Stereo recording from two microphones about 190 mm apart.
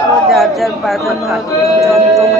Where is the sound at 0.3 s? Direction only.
Centre (ahead or behind).